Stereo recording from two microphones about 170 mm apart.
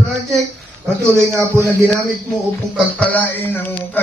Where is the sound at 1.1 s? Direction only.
15° right (ahead or behind).